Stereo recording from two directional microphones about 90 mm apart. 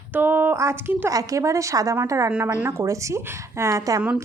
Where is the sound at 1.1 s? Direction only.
40° right (ahead or behind).